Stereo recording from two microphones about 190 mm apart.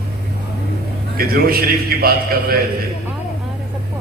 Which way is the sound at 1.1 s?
50° right (ahead or behind).